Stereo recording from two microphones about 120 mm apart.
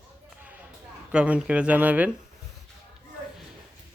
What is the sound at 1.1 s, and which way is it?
Speech, 10° right (ahead or behind).